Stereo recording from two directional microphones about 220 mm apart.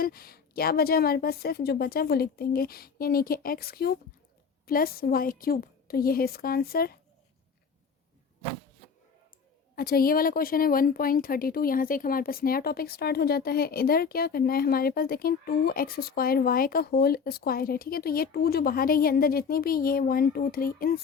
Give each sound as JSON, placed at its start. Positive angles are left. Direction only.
{"t": 0.0, "sound": "a woman's voice", "side_deg": 45}
{"t": 9.7, "sound": "a woman's voice", "side_deg": 40}